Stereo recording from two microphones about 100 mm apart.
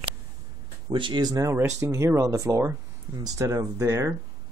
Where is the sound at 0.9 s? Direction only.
50° right (ahead or behind).